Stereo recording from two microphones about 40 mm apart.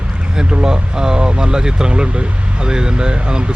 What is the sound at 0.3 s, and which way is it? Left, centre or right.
Speech, centre.